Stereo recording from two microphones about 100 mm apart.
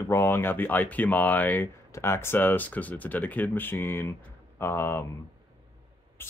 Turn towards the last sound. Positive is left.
turn(degrees=25)  # may be behind; listen again after turning